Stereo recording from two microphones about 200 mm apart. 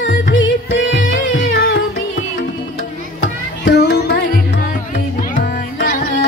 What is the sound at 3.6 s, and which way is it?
Music, 55° left (ahead or behind).